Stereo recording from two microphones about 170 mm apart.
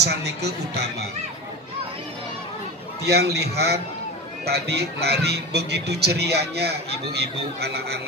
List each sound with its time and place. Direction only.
0.0 s speech: 80° right
3.1 s speech: 70° right (ahead or behind)